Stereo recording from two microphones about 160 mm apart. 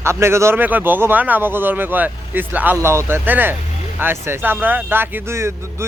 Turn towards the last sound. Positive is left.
turn(degrees=-15)  # may be behind; listen again after turning